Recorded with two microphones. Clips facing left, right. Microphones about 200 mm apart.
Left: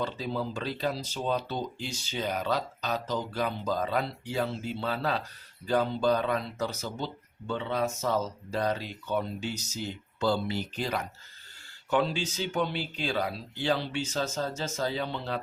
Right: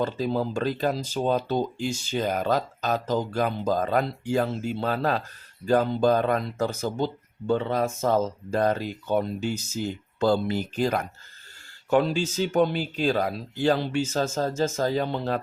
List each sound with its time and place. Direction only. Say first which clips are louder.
0.0 s speech: right 6 dB; 45° right (ahead or behind)